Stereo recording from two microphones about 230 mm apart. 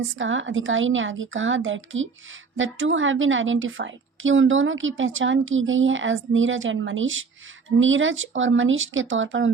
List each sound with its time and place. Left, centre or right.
0.0 s a woman's voice: right